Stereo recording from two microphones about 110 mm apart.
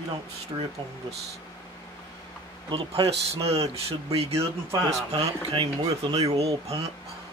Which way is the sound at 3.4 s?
65° right (ahead or behind).